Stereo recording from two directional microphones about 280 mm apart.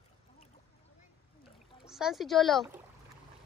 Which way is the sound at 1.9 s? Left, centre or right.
Centre.